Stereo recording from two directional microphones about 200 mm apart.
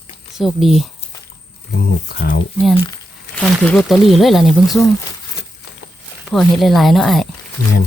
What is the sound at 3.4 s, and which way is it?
Speech, centre (ahead or behind).